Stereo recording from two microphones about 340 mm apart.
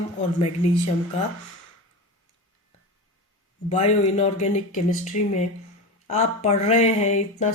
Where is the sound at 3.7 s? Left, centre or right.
Centre.